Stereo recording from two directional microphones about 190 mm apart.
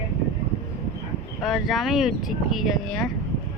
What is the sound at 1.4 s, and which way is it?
Speech, centre (ahead or behind).